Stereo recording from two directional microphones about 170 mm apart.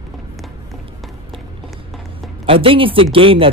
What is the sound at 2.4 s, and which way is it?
Speech, 30° right (ahead or behind).